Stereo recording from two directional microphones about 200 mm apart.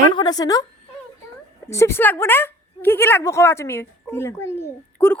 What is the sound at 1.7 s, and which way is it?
A woman's voice, 15° left (ahead or behind).